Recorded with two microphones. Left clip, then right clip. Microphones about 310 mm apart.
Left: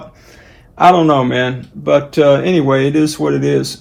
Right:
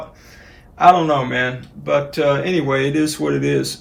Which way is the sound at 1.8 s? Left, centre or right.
Left.